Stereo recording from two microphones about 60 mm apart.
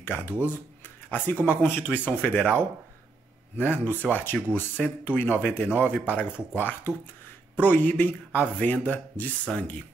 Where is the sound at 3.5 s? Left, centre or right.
Left.